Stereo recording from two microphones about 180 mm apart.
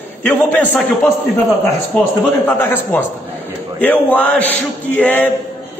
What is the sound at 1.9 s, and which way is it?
A man's voice, 5° left (ahead or behind).